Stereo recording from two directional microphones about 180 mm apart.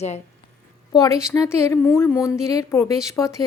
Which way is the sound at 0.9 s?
20° left (ahead or behind).